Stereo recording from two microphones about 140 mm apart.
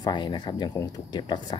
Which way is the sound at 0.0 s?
35° left (ahead or behind).